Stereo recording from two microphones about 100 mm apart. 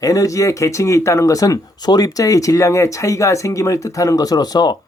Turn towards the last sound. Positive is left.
turn(degrees=45)  # may be behind; listen again after turning